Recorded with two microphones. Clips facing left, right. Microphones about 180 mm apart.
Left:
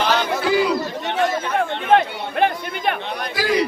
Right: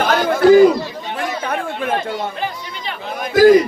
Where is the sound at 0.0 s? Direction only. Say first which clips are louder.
Right 7 dB; 50° right (ahead or behind).